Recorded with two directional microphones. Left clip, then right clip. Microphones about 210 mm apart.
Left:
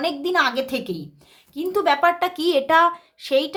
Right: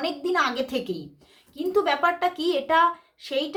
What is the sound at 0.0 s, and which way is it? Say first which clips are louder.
A woman's voice: left 4 dB; 35° left (ahead or behind).